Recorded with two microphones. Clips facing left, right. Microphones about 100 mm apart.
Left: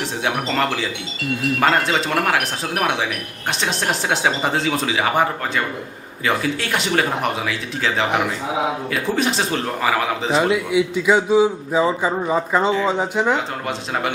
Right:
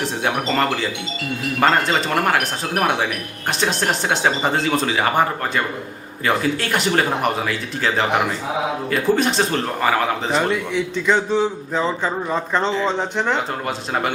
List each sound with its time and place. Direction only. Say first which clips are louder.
0.0 s a man's voice: right 1 dB; centre (ahead or behind)